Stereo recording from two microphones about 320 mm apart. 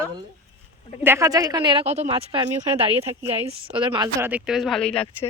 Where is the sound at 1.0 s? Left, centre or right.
Centre.